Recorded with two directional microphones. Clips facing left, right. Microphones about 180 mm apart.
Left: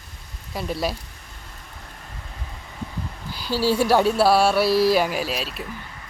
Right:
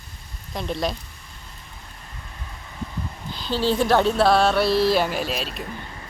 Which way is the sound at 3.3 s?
10° left (ahead or behind).